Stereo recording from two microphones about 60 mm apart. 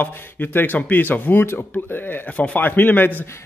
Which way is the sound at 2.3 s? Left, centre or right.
Left.